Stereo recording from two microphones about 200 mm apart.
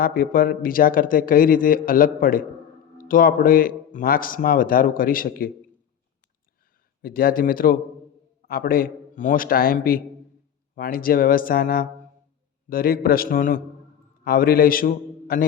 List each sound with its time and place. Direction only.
0.0 s speech: 45° left (ahead or behind)
7.0 s speech: 45° left (ahead or behind)